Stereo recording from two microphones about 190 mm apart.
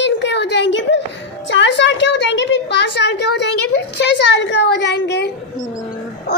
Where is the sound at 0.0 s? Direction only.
65° left (ahead or behind).